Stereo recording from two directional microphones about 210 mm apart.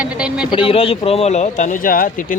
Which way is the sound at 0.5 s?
25° left (ahead or behind).